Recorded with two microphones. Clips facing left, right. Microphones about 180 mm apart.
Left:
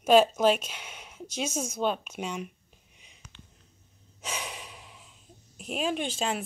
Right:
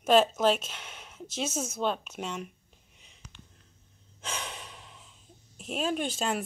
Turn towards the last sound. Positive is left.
turn(degrees=0)  # may be behind; listen again after turning